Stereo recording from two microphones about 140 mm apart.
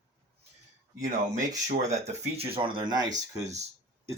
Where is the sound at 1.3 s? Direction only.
60° right (ahead or behind).